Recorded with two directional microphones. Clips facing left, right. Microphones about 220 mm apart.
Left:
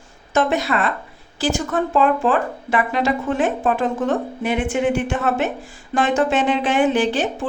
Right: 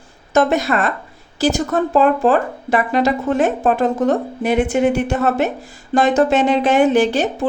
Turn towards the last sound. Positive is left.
turn(degrees=-40)  # may be behind; listen again after turning